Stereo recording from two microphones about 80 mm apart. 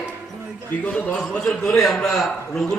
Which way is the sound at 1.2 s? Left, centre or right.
Centre.